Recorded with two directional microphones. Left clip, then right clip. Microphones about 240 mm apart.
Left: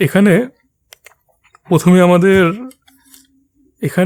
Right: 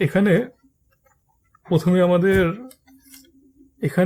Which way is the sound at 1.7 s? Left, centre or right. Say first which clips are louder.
Left 7 dB; left.